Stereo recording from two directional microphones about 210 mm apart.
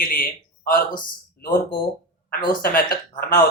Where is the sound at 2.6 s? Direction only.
45° left (ahead or behind).